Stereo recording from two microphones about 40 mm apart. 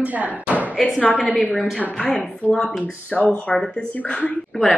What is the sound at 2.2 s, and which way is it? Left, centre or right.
Speech, left.